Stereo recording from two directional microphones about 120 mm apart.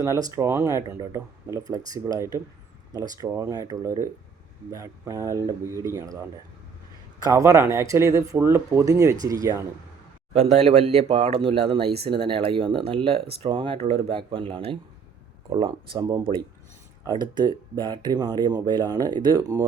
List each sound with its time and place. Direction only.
0.0 s speech: 30° right (ahead or behind)
7.2 s speech: 30° right (ahead or behind)
10.3 s speech: 60° right (ahead or behind); by 19.6 s 30° right (ahead or behind)